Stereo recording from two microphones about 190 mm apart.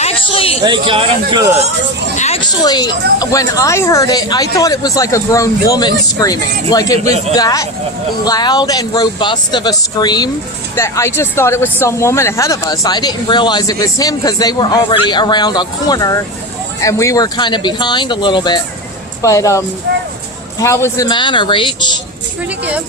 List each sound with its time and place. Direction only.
0.0 s a sound: 30° left (ahead or behind)
0.6 s speech: 25° right (ahead or behind)
2.1 s speech: 35° left (ahead or behind)
2.6 s speech: 20° left (ahead or behind)
19.9 s speech: 60° right (ahead or behind)
20.6 s speech: 15° left (ahead or behind)